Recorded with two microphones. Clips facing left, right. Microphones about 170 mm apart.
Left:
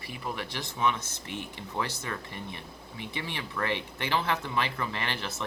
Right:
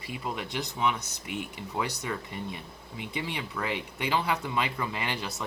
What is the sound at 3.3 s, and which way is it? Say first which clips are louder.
Speech: left 5 dB; 15° right (ahead or behind).